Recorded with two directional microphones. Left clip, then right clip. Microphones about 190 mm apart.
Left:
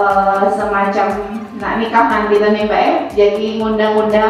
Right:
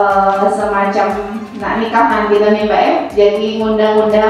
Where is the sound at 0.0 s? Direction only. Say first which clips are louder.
Right 1 dB; 25° left (ahead or behind).